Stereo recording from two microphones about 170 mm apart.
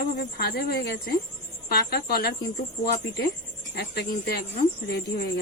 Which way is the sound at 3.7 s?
70° left (ahead or behind).